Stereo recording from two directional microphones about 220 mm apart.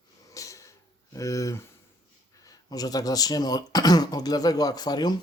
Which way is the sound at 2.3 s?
15° left (ahead or behind).